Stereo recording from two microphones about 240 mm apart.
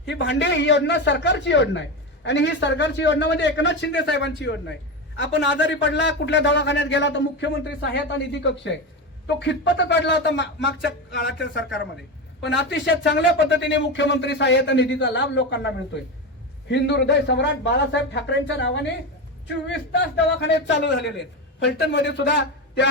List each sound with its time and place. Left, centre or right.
0.1 s a man's voice: left